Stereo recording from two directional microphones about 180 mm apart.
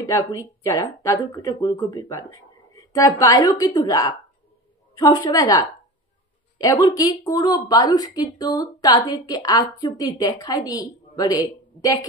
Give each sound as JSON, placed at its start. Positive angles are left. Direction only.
{"t": 0.0, "sound": "a woman's voice", "side_deg": 15}